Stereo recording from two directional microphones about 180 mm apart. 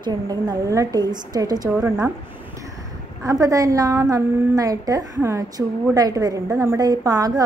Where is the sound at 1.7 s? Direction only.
10° right (ahead or behind).